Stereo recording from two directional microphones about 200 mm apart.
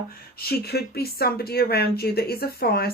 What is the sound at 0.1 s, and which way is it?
Speech, 50° left (ahead or behind).